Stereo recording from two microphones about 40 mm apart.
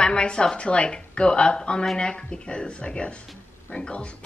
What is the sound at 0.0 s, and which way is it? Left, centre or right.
A woman's voice, left.